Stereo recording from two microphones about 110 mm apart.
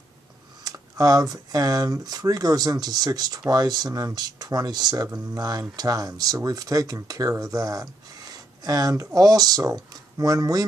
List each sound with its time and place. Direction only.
0.7 s speech: 35° right (ahead or behind)